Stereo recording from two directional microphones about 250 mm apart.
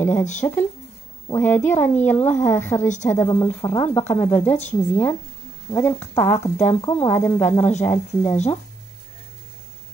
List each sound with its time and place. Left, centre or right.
0.2 s speech: left
1.3 s speech: centre